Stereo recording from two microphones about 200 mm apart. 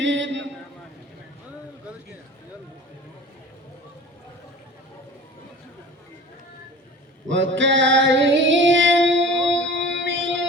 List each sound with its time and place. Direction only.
0.0 s a sound: 65° right (ahead or behind)
7.3 s female singing: 65° right (ahead or behind)
9.6 s music: 65° right (ahead or behind)